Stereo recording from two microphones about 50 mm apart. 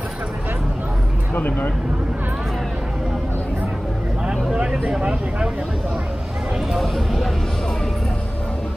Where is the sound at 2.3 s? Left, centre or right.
Centre.